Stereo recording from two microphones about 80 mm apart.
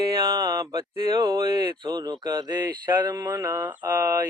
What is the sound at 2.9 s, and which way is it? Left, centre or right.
Mantra, right.